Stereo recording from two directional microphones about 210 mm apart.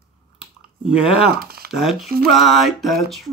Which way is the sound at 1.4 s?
45° right (ahead or behind).